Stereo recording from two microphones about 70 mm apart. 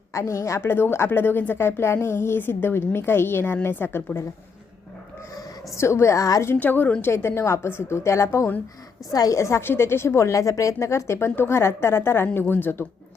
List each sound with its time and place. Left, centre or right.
0.1 s speech: left
5.7 s a woman's voice: left
6.6 s a woman's voice: left
7.0 s speech: left
9.1 s a woman's voice: left
9.4 s a woman's voice: left